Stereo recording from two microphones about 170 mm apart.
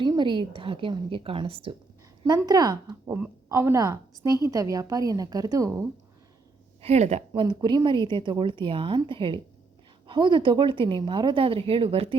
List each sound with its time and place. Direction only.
0.0 s a woman's voice: 25° right (ahead or behind)
6.8 s a woman's voice: 40° right (ahead or behind)
7.4 s speech: 25° right (ahead or behind)